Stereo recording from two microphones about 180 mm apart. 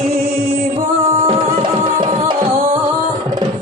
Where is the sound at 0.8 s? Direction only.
50° right (ahead or behind).